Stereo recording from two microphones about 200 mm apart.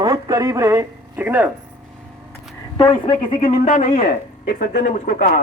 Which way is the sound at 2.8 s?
25° left (ahead or behind).